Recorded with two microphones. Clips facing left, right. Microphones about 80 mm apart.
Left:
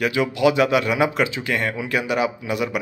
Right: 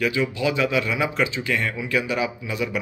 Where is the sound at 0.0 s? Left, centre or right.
Left.